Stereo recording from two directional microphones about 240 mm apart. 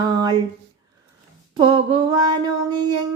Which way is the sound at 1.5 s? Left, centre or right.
Right.